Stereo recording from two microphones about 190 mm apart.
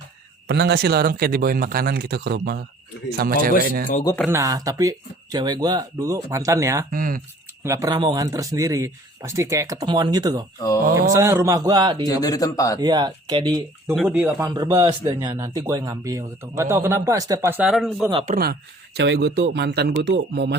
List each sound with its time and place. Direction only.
0.4 s a man's voice: 60° right (ahead or behind)
4.0 s speech: 10° left (ahead or behind)
4.3 s speech: 15° right (ahead or behind)
6.9 s speech: 50° right (ahead or behind)
7.6 s speech: 15° right (ahead or behind)
12.0 s speech: 20° left (ahead or behind)
12.8 s speech: 20° right (ahead or behind)
13.9 s speech: centre (ahead or behind)
14.2 s speech: 15° right (ahead or behind)
18.1 s speech: 30° right (ahead or behind)
18.9 s a man's voice: 60° right (ahead or behind)